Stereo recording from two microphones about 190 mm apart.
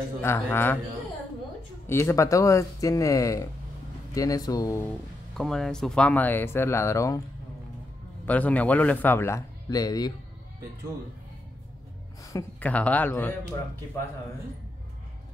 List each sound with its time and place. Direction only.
0.2 s speech: 10° left (ahead or behind)
1.9 s speech: 15° left (ahead or behind)
5.4 s speech: 5° left (ahead or behind)
8.3 s speech: 5° left (ahead or behind)
12.2 s speech: 15° left (ahead or behind)